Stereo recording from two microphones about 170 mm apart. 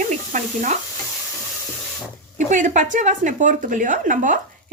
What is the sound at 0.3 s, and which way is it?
Speech, 45° right (ahead or behind).